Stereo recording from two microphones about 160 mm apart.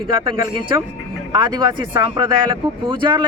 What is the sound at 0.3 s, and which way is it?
Speech, 30° right (ahead or behind).